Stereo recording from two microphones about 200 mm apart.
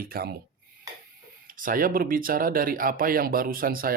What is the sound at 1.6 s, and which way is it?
Speech, 45° right (ahead or behind).